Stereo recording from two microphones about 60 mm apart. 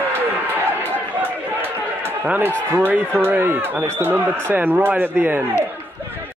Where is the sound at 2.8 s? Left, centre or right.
Right.